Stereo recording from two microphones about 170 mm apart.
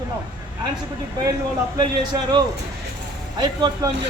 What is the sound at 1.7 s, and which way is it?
Speech, 25° right (ahead or behind).